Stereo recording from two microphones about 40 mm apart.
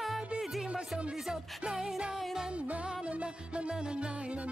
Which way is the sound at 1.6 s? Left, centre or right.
Centre.